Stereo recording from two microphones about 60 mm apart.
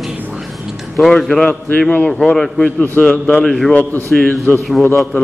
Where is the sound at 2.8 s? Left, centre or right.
Left.